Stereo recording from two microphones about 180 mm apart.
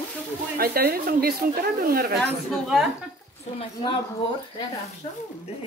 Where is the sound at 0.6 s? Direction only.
55° right (ahead or behind).